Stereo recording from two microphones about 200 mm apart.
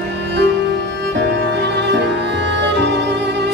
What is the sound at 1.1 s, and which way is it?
Music, 60° right (ahead or behind).